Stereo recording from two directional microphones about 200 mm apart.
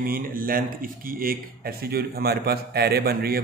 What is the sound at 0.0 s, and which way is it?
A man's voice, 45° right (ahead or behind).